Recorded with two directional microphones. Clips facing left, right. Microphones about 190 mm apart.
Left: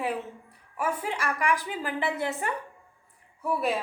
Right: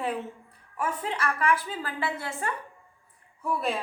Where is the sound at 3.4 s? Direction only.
5° left (ahead or behind).